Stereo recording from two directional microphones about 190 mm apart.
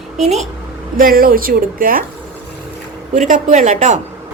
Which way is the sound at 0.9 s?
50° right (ahead or behind).